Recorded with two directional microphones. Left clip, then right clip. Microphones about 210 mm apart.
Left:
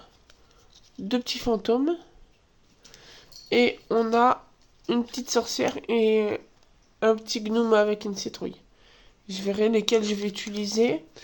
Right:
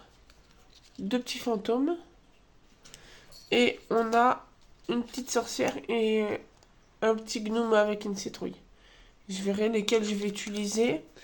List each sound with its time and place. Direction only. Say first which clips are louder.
1.0 s speech: left 4 dB; 20° left (ahead or behind)
3.0 s a sound: left 4 dB; 20° left (ahead or behind)
4.9 s speech: left 5 dB; 25° left (ahead or behind)